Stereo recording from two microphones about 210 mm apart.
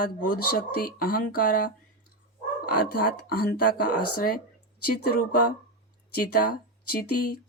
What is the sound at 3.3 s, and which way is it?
Speech, 45° left (ahead or behind).